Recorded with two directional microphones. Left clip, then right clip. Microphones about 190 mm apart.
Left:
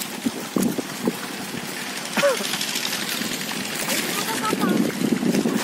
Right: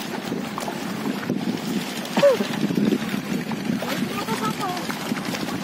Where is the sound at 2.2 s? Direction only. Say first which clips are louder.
Right 3 dB; 20° right (ahead or behind).